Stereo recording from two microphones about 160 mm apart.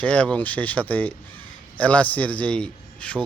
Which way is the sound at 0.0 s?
5° left (ahead or behind).